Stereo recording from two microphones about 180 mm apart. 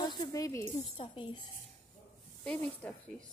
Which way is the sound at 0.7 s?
30° left (ahead or behind).